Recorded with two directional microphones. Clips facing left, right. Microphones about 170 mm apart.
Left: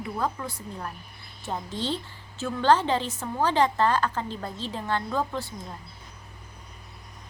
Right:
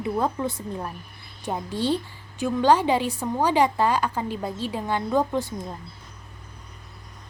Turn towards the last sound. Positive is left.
turn(degrees=-20)  # may be behind; listen again after turning